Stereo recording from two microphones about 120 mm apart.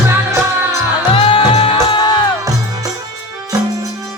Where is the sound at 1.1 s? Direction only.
50° left (ahead or behind).